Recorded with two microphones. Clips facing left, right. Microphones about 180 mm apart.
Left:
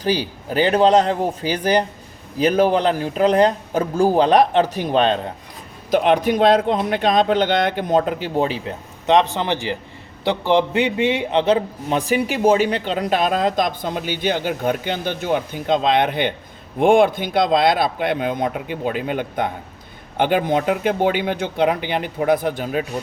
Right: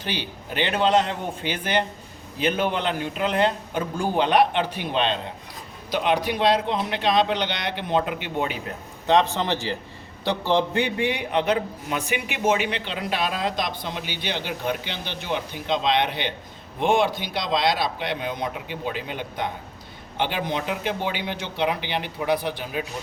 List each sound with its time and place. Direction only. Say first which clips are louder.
0.0 s a man's voice: left 9 dB; 40° left (ahead or behind)
9.0 s a man's voice: left 3 dB; 15° left (ahead or behind); by 22.9 s 50° left (ahead or behind)